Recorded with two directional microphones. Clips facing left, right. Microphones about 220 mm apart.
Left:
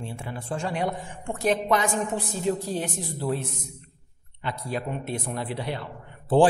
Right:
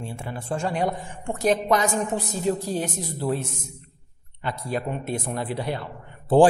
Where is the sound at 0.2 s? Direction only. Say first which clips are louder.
Right 4 dB; 45° right (ahead or behind).